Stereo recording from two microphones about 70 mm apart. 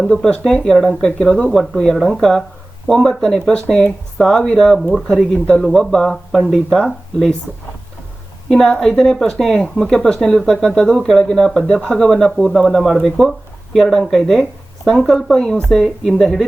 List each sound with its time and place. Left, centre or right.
0.0 s speech: centre
8.4 s speech: centre